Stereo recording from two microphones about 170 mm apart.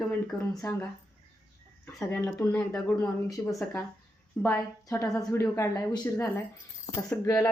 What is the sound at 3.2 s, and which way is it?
Speech, 20° left (ahead or behind).